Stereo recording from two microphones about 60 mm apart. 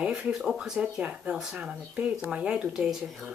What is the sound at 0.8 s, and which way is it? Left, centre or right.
Speech, right.